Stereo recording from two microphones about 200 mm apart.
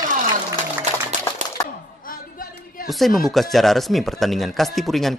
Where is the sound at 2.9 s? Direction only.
Centre (ahead or behind).